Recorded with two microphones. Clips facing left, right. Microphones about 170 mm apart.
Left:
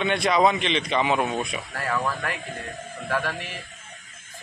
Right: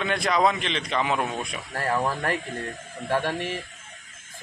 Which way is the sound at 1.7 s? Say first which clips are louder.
Right 2 dB; 35° right (ahead or behind).